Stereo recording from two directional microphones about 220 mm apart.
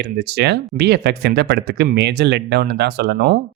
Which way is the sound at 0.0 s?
50° right (ahead or behind).